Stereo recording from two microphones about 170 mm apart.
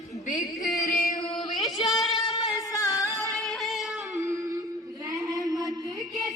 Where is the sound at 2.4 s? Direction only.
20° left (ahead or behind).